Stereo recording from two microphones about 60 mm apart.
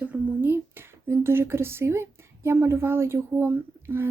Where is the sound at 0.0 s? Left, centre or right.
Right.